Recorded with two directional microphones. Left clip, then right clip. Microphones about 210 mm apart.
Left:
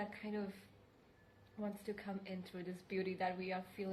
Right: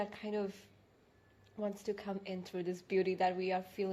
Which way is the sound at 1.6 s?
40° right (ahead or behind).